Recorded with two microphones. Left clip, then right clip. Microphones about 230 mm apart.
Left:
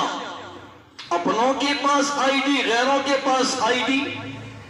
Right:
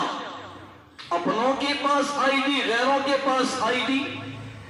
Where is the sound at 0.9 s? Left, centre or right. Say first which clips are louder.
Left 3 dB; left.